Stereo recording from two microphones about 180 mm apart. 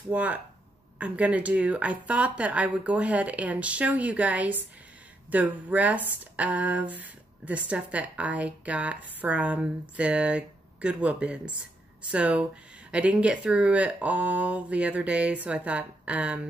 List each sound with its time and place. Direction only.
0.1 s speech: 10° right (ahead or behind)